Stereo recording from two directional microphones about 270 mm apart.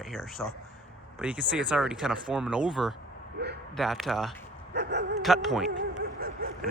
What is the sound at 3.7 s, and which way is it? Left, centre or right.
Speech, centre.